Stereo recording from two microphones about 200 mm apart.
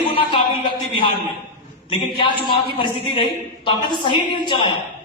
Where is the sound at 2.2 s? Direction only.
25° left (ahead or behind).